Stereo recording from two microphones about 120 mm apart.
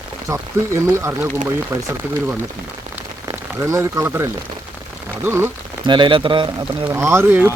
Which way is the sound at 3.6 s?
25° right (ahead or behind).